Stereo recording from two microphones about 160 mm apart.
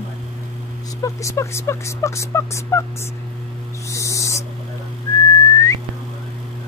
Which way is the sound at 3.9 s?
20° left (ahead or behind).